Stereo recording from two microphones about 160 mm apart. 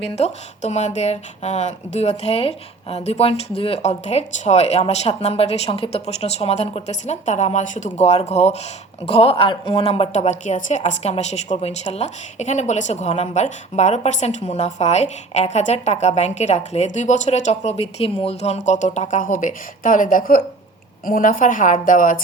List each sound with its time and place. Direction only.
0.0 s a woman's voice: 45° left (ahead or behind)